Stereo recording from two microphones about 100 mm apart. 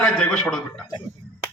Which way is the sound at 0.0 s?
10° left (ahead or behind).